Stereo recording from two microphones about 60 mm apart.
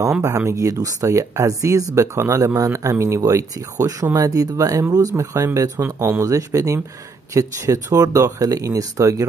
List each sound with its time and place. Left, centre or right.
0.5 s speech: right
3.2 s speech: right
5.9 s speech: right
6.2 s speech: right